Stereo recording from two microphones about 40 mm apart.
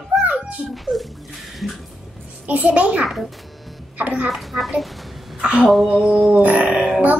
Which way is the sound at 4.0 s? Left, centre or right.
Right.